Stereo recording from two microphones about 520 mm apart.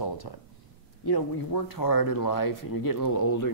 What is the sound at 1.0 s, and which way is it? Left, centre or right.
Speech, left.